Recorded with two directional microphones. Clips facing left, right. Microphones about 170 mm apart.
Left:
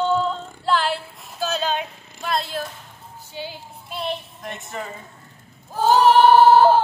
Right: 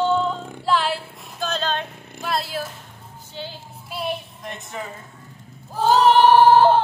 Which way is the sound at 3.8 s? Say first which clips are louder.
Right 1 dB; 5° right (ahead or behind).